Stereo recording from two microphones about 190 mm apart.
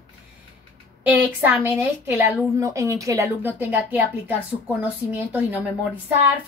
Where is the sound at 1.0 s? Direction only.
10° right (ahead or behind).